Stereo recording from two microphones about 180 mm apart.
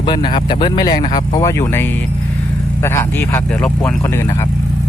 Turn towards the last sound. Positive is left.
turn(degrees=10)  # may be behind; listen again after turning